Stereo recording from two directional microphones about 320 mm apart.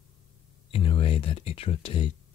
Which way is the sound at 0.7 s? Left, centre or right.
Centre.